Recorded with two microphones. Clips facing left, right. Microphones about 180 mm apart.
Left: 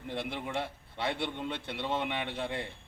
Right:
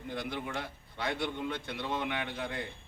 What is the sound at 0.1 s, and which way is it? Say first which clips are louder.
A man's voice: left 1 dB; 25° left (ahead or behind).